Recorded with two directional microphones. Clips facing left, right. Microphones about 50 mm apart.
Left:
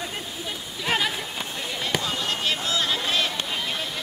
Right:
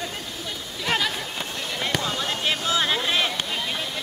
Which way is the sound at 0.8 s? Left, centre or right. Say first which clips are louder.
Even; centre.